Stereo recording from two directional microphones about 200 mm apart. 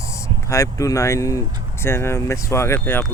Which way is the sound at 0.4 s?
15° left (ahead or behind).